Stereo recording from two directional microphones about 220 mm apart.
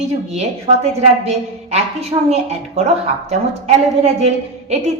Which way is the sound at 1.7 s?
30° right (ahead or behind).